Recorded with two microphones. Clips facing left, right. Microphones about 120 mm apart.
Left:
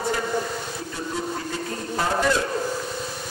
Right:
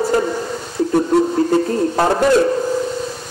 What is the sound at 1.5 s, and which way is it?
Speech, 55° right (ahead or behind).